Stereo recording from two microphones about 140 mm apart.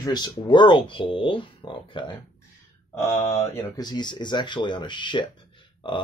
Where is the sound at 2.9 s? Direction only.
20° left (ahead or behind).